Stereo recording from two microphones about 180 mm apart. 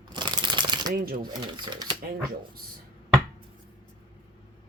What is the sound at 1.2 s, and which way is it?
Speech, 25° right (ahead or behind).